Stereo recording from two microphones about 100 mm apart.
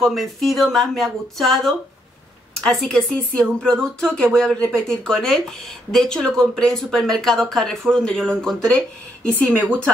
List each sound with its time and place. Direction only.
0.0 s speech: centre (ahead or behind)
9.5 s speech: 20° right (ahead or behind)